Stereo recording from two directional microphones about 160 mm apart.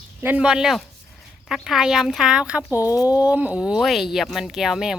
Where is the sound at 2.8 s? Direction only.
20° left (ahead or behind).